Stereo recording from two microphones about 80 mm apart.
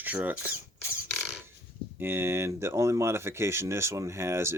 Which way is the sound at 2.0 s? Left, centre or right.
Right.